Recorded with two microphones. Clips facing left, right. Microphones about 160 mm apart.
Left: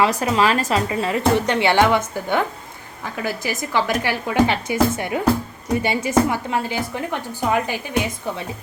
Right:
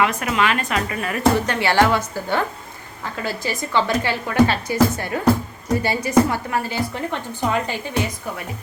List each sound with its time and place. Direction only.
0.0 s a woman's voice: 30° left (ahead or behind); by 7.8 s 10° left (ahead or behind)